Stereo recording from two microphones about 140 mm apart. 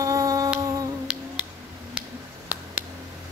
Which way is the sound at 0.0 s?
25° right (ahead or behind).